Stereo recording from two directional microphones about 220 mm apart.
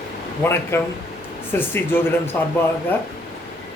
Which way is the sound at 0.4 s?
10° left (ahead or behind).